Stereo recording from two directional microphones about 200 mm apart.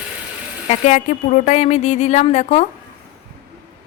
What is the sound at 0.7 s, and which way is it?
A woman's voice, 40° left (ahead or behind).